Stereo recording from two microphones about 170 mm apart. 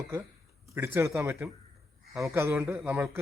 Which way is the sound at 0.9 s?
15° right (ahead or behind).